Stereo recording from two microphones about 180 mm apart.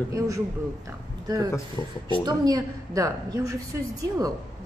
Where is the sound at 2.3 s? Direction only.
20° right (ahead or behind).